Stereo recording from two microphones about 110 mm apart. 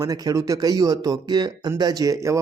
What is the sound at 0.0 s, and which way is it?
Speech, 30° right (ahead or behind).